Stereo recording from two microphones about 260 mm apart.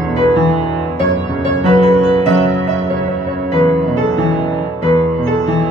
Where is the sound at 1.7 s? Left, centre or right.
Centre.